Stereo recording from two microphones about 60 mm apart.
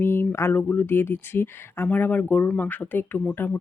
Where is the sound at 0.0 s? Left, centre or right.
Left.